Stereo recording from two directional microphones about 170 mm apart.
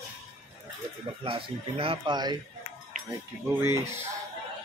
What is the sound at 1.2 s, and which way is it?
Speech, 35° right (ahead or behind).